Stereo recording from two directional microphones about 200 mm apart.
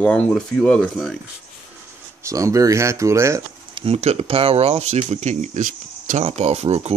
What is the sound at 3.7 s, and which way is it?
Speech, 30° right (ahead or behind).